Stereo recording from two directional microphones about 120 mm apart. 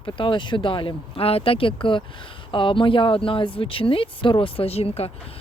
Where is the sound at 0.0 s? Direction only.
45° left (ahead or behind).